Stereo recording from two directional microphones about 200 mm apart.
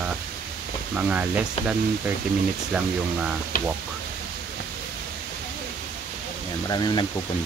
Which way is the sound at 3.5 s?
45° left (ahead or behind).